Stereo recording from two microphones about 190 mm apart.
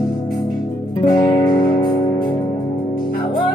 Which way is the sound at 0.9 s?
20° left (ahead or behind).